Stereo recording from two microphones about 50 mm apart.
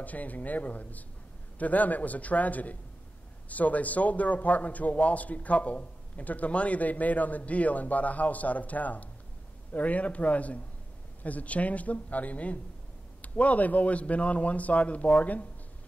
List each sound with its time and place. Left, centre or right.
0.0 s a man's voice: left